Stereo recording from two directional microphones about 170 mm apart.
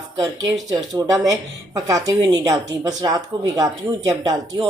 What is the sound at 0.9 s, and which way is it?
A man's voice, 15° right (ahead or behind).